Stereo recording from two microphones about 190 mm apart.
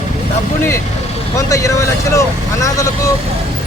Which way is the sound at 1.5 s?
15° left (ahead or behind).